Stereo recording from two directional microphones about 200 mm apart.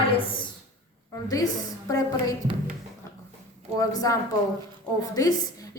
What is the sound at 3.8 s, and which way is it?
Speech, 15° left (ahead or behind).